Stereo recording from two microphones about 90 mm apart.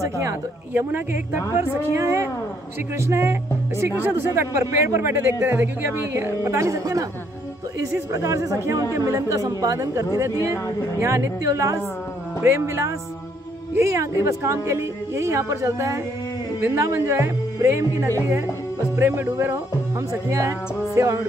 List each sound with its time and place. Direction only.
0.0 s speech: 35° right (ahead or behind)
0.7 s a woman's voice: 25° right (ahead or behind)
8.1 s a woman's voice: 35° right (ahead or behind)
20.9 s music: 35° right (ahead or behind)